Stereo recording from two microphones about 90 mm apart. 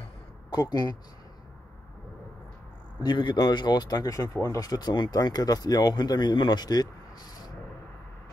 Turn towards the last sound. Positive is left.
turn(degrees=50)  # may be behind; listen again after turning